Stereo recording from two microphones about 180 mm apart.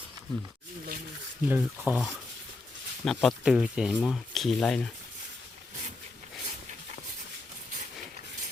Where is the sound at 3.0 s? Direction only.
Centre (ahead or behind).